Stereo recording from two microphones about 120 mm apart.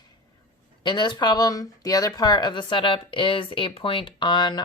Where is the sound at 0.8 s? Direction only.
40° left (ahead or behind).